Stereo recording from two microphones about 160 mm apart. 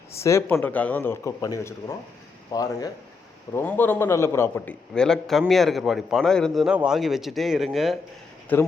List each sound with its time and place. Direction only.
0.1 s speech: 15° left (ahead or behind)
3.5 s a man's voice: 10° left (ahead or behind)
8.5 s speech: 10° left (ahead or behind)